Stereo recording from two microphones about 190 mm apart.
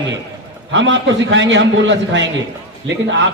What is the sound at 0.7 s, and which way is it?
A man's voice, 70° right (ahead or behind).